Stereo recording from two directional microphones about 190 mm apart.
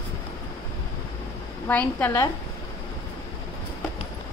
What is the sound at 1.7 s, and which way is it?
Speech, 10° left (ahead or behind).